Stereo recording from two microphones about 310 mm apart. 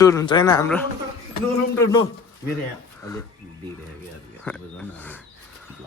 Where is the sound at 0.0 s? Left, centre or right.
Centre.